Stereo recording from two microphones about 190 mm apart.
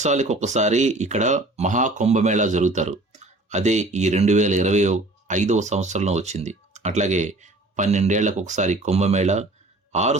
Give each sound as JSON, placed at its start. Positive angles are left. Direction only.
{"t": 0.0, "sound": "a man's voice", "side_deg": -40}